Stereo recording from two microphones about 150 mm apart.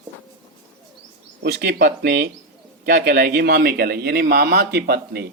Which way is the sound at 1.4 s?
90° right.